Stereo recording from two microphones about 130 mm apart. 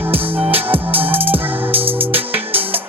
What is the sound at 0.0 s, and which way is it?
Music, 15° right (ahead or behind).